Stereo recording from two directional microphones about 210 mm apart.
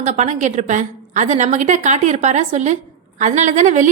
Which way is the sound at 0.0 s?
35° right (ahead or behind).